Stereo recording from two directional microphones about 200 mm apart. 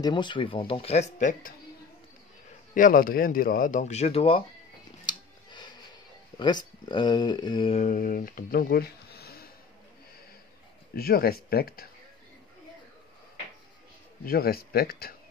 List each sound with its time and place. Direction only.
0.0 s speech: 25° left (ahead or behind); by 1.5 s 40° left (ahead or behind)
2.7 s speech: 45° left (ahead or behind)
5.0 s a sound: 20° left (ahead or behind)
6.3 s speech: 20° left (ahead or behind)
7.8 s speech: 40° left (ahead or behind)
11.0 s speech: 50° left (ahead or behind)
14.2 s speech: 50° left (ahead or behind)